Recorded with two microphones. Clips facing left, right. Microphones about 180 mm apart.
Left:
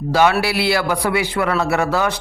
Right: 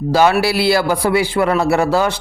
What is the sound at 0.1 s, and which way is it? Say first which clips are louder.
A man's voice: right 2 dB; 35° right (ahead or behind).